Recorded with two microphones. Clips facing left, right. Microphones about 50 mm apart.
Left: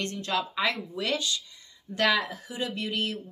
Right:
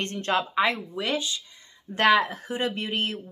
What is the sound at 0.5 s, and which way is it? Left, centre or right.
Speech, right.